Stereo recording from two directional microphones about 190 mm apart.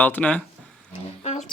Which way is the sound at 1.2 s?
35° left (ahead or behind).